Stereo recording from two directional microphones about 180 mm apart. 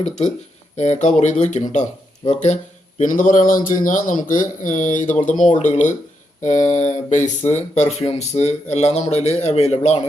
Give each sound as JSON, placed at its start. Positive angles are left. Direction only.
{"t": 0.8, "sound": "speech", "side_deg": 40}